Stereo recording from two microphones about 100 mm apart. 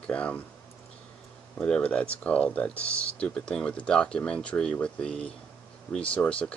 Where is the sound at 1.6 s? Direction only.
10° left (ahead or behind).